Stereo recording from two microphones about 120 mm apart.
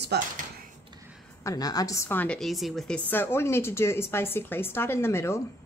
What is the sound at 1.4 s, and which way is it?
Speech, 30° left (ahead or behind).